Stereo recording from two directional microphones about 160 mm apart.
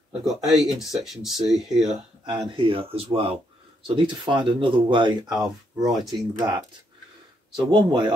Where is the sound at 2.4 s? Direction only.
35° right (ahead or behind).